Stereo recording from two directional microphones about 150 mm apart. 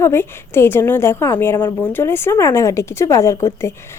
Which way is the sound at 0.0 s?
15° left (ahead or behind).